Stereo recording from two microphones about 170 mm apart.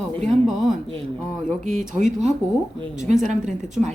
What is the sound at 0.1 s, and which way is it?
A woman's voice, centre (ahead or behind).